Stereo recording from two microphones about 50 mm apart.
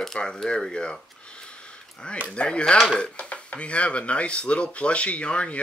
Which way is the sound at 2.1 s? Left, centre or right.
Left.